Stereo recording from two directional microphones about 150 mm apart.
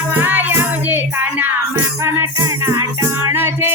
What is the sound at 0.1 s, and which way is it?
Music, 10° right (ahead or behind).